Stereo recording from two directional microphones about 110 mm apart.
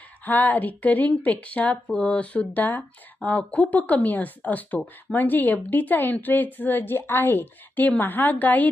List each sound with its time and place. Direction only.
0.3 s speech: 15° left (ahead or behind)